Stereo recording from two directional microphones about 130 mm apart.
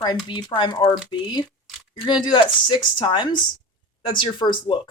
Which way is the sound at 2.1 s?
35° left (ahead or behind).